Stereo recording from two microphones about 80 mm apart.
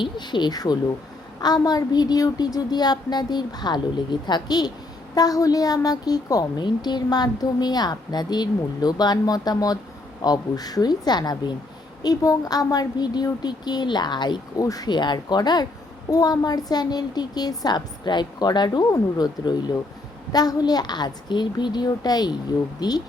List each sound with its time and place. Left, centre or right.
0.0 s a woman's voice: left
6.7 s a woman's voice: left
12.0 s a woman's voice: left
14.6 s a woman's voice: left
14.8 s a woman's voice: left